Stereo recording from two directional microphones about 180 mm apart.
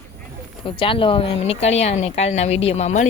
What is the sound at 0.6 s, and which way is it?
Speech, 30° left (ahead or behind).